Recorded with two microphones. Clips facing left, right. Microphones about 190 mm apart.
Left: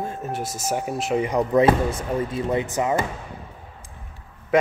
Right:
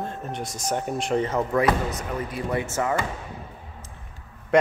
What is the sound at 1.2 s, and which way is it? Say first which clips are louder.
Speech: left 4 dB; 15° left (ahead or behind).